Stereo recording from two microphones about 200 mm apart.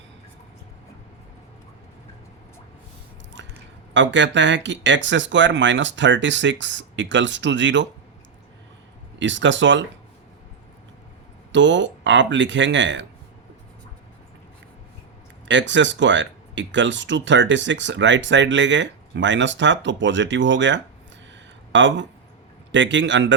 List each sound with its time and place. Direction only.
3.4 s a sound: 65° right (ahead or behind)
3.9 s speech: 65° right (ahead or behind)
9.1 s speech: 65° right (ahead or behind)
11.5 s speech: 65° right (ahead or behind)
15.4 s speech: 65° right (ahead or behind)